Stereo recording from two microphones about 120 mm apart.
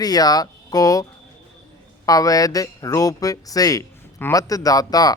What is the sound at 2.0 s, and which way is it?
Speech, 30° left (ahead or behind).